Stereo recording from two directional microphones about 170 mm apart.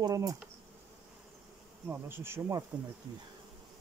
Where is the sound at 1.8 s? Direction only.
15° right (ahead or behind).